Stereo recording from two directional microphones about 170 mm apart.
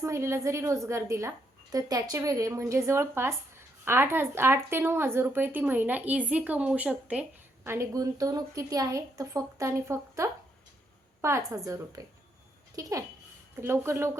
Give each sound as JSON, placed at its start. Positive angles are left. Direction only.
{"t": 0.0, "sound": "a woman's voice", "side_deg": -15}